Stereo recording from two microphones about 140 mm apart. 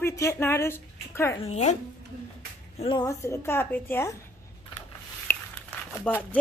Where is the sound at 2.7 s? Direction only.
40° left (ahead or behind).